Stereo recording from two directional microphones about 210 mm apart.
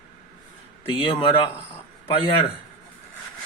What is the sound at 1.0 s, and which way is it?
Speech, 25° left (ahead or behind).